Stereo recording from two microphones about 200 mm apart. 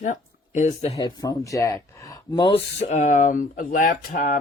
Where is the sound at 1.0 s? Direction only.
20° left (ahead or behind).